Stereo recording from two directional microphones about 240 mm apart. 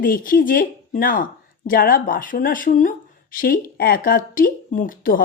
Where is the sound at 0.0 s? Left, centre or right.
Left.